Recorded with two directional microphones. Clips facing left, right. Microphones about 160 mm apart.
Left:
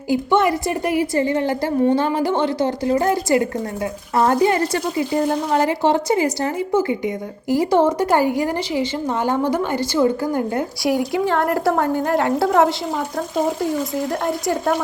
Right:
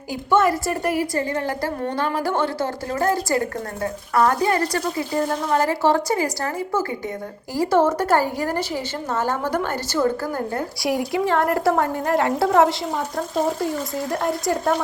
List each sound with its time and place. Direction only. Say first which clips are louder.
0.1 s a woman's voice: left 2 dB; 20° left (ahead or behind)
10.8 s a woman's voice: left 2 dB; centre (ahead or behind)